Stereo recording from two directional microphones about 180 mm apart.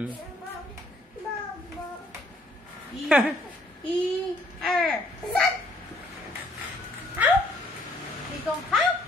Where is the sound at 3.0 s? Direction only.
5° right (ahead or behind).